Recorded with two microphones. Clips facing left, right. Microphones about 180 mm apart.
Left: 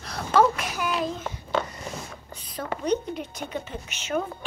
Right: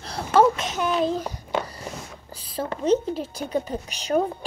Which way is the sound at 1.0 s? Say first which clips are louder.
Right 5 dB; 35° right (ahead or behind).